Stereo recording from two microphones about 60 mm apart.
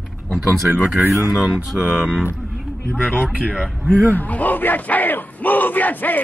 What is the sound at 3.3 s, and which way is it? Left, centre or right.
Speech, centre.